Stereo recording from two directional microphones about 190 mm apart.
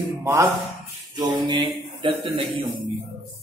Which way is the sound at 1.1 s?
25° right (ahead or behind).